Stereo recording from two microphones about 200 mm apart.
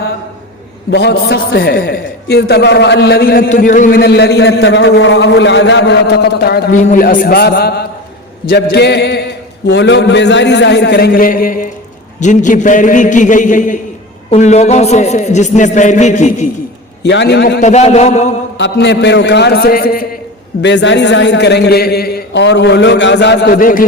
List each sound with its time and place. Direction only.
0.9 s a man's voice: 55° left (ahead or behind); by 16.5 s 35° left (ahead or behind)
17.0 s a man's voice: 60° left (ahead or behind)
17.6 s a man's voice: 35° left (ahead or behind)
18.5 s a man's voice: 60° left (ahead or behind)
20.6 s a man's voice: 60° left (ahead or behind); by 23.8 s 45° left (ahead or behind)